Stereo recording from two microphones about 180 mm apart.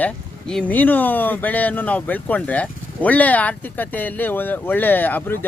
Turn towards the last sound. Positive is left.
turn(degrees=10)  # may be behind; listen again after turning